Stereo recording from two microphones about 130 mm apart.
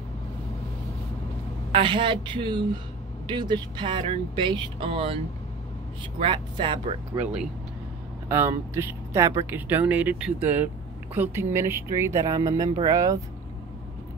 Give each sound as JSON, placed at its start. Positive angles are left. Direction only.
{"t": 1.7, "sound": "speech", "side_deg": -40}
{"t": 8.3, "sound": "speech", "side_deg": -15}